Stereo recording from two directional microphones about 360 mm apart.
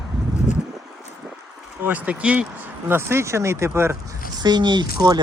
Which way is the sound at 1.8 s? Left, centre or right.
Centre.